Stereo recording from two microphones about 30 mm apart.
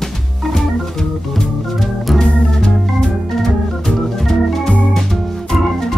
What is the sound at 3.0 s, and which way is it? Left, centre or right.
Organ, centre.